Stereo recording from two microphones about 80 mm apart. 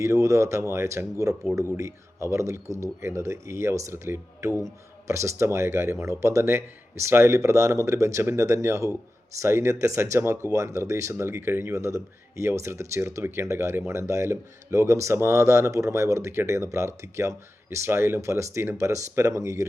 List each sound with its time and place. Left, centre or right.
0.0 s speech: right